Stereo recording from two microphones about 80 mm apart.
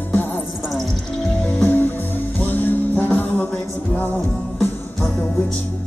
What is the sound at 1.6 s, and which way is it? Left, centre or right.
Music, left.